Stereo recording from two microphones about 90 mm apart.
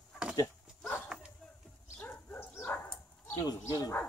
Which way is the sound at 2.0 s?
25° left (ahead or behind).